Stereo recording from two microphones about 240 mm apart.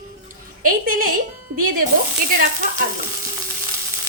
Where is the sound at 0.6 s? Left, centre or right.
Right.